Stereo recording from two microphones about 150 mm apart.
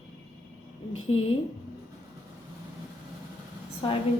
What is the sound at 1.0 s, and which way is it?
Speech, 40° left (ahead or behind).